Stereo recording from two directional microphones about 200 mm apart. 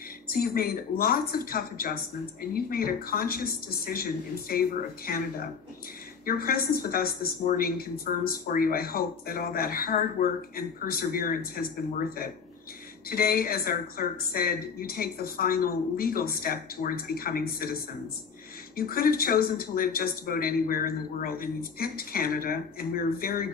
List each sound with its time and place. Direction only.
0.3 s a man's voice: 50° left (ahead or behind)
13.1 s a man's voice: 50° left (ahead or behind)
18.8 s a man's voice: 45° left (ahead or behind)